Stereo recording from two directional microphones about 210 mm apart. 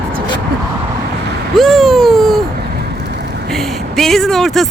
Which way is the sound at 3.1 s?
50° right (ahead or behind).